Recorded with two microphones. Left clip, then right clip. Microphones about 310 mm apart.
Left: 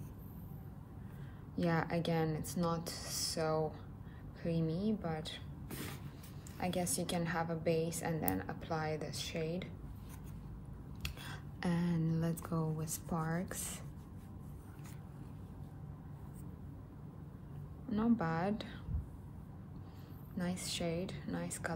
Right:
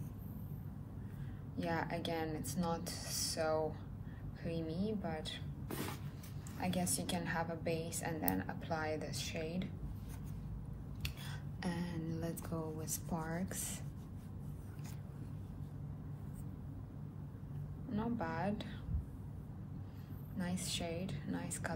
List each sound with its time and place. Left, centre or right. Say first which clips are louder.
1.6 s a woman's voice: left 3 dB; left
6.6 s a woman's voice: left 2 dB; left
11.0 s a sound: left 1 dB; left
17.9 s a woman's voice: left 4 dB; left
20.3 s a woman's voice: left 1 dB; left